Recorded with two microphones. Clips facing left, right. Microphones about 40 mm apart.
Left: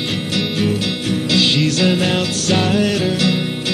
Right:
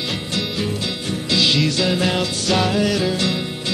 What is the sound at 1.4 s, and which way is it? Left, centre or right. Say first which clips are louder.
Music: left 1 dB; left.